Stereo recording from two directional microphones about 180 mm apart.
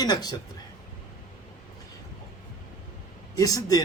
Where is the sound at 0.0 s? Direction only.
20° left (ahead or behind).